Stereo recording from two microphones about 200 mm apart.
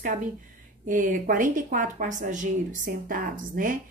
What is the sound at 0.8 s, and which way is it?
Speech, 45° right (ahead or behind).